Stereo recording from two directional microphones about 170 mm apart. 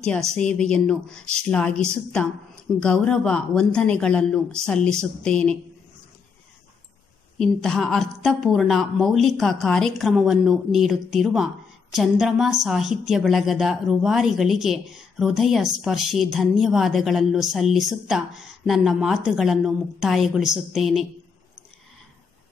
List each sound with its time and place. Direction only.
0.0 s a woman's voice: 5° left (ahead or behind)
7.3 s a woman's voice: 5° left (ahead or behind)